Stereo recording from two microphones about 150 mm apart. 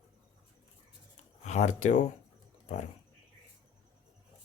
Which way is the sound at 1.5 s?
50° left (ahead or behind).